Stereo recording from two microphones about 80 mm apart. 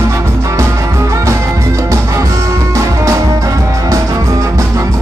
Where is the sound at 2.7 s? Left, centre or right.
Right.